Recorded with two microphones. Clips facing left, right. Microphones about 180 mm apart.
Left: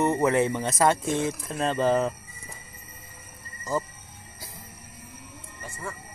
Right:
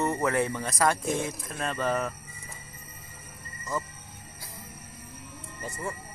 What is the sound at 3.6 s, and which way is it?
Music, 30° left (ahead or behind).